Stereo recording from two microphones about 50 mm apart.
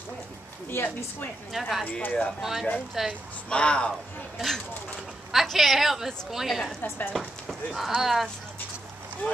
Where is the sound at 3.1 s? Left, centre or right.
Left.